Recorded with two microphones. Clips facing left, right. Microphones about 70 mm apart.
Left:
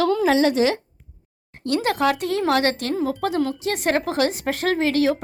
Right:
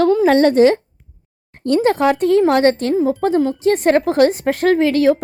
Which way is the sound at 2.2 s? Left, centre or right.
Right.